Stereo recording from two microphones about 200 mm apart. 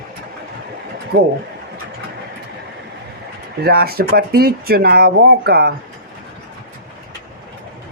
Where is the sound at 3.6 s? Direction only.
50° right (ahead or behind).